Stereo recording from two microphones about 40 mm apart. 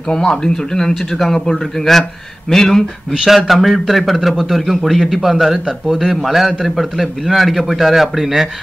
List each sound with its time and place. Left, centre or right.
0.1 s speech: centre
1.1 s speech: centre
3.1 s speech: centre